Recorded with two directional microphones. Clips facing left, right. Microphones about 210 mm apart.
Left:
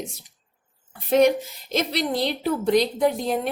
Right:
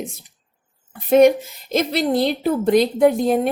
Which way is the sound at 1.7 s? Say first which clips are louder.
Right 5 dB; 50° right (ahead or behind).